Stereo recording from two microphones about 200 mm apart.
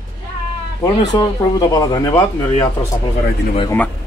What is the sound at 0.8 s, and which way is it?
Speech, 20° left (ahead or behind).